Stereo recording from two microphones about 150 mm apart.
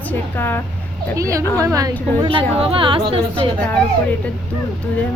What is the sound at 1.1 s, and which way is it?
Speech, 20° right (ahead or behind).